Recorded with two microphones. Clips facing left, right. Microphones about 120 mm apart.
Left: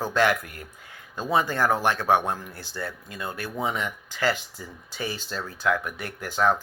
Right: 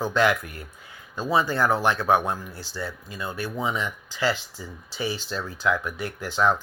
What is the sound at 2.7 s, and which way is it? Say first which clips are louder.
Speech: even; 55° left (ahead or behind).